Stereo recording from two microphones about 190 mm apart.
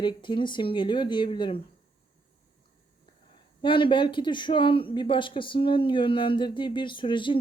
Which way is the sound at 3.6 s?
25° left (ahead or behind).